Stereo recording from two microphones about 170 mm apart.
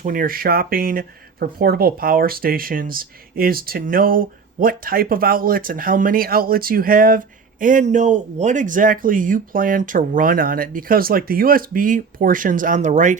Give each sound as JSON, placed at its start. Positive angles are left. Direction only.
{"t": 0.0, "sound": "speech", "side_deg": -55}